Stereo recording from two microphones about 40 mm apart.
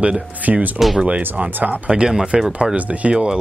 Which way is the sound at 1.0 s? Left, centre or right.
Right.